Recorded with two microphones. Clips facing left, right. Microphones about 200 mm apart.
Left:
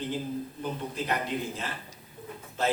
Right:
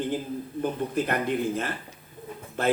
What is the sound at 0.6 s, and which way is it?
A man's voice, 55° right (ahead or behind).